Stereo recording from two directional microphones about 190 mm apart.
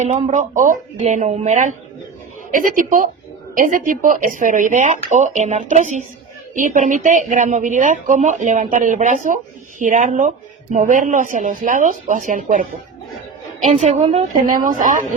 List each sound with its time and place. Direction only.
0.0 s a woman's voice: 40° right (ahead or behind)
13.7 s a woman's voice: 40° right (ahead or behind)